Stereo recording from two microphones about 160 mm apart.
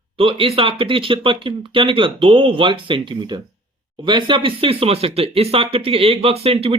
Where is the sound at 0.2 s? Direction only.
35° right (ahead or behind).